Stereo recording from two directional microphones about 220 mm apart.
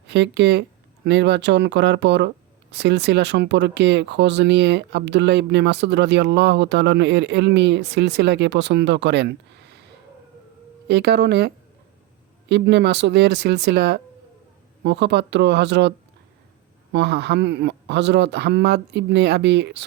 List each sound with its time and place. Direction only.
0.1 s speech: 50° right (ahead or behind)
10.8 s speech: 50° right (ahead or behind)
16.9 s speech: 50° right (ahead or behind)